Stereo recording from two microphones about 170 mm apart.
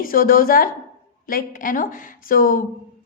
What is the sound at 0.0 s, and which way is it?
A woman's voice, 55° left (ahead or behind).